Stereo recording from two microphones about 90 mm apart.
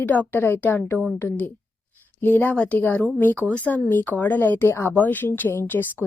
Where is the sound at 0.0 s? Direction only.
20° left (ahead or behind).